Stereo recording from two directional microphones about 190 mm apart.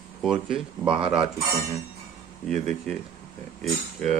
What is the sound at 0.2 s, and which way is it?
Speech, 5° right (ahead or behind).